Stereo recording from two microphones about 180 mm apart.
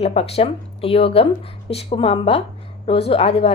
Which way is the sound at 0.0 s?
35° left (ahead or behind).